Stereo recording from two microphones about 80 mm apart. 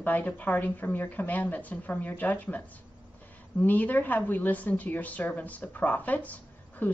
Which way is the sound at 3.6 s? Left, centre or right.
Left.